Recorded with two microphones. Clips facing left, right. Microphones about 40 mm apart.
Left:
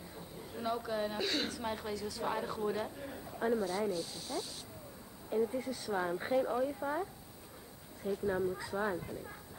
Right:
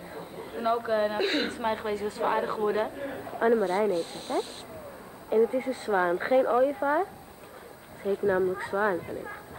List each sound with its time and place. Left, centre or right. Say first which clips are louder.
0.1 s a woman's voice: right 10 dB; right